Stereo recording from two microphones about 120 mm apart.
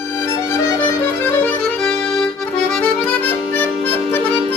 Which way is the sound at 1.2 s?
15° left (ahead or behind).